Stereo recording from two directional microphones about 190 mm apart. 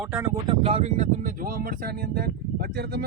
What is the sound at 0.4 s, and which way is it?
Speech, 30° right (ahead or behind).